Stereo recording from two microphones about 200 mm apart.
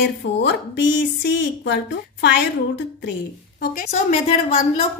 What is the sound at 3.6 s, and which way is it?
Speech, 45° left (ahead or behind).